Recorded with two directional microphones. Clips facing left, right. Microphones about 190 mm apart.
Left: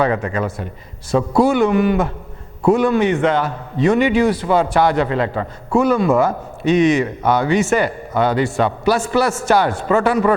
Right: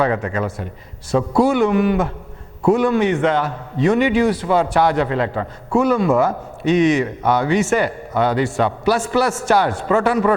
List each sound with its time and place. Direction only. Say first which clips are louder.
0.0 s a man's voice: left 1 dB; 20° left (ahead or behind)